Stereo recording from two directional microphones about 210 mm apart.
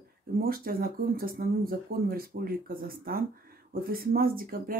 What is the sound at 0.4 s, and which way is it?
Speech, 45° right (ahead or behind).